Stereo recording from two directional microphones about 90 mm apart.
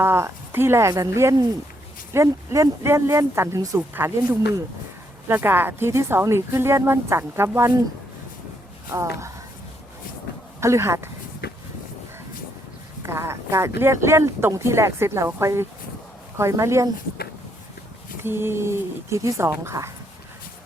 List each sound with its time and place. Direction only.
0.0 s speech: 30° right (ahead or behind)
5.3 s speech: 25° right (ahead or behind)
8.9 s speech: 35° right (ahead or behind)
10.6 s speech: 30° right (ahead or behind)
13.0 s speech: 30° right (ahead or behind)
18.2 s speech: 25° right (ahead or behind)